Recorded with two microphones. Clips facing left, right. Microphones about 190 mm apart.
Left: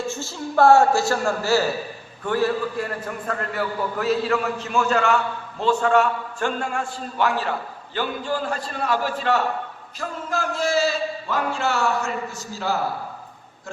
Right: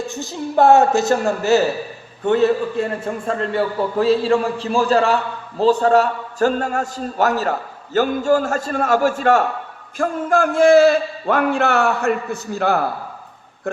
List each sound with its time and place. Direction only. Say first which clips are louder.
0.0 s a woman's voice: right 3 dB; 15° right (ahead or behind); by 12.8 s 60° right (ahead or behind)